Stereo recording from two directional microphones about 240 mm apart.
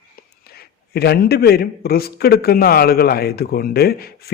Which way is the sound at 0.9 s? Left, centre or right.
Left.